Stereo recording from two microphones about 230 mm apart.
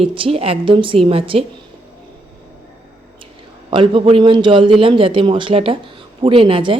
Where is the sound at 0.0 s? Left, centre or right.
Right.